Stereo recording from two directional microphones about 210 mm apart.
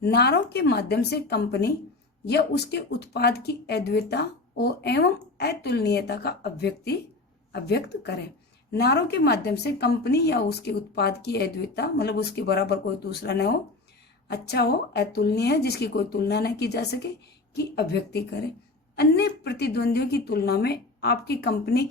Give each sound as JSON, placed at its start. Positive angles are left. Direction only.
{"t": 0.0, "sound": "a woman's voice", "side_deg": 50}